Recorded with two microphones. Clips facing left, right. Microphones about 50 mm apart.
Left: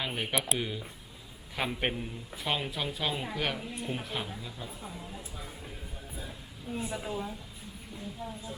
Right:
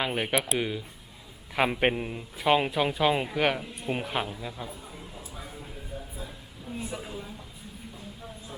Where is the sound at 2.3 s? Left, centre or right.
Centre.